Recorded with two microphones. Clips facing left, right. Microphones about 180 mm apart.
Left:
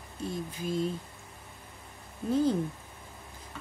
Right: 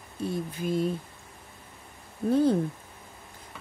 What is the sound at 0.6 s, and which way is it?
Speech, 60° right (ahead or behind).